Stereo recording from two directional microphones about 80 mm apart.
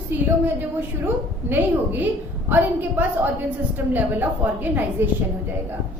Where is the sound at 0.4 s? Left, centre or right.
Right.